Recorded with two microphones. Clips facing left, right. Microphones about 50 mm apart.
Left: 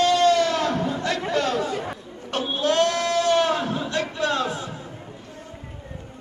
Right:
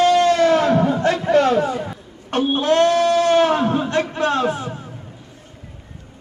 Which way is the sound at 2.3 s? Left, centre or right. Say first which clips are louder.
Right 5 dB; right.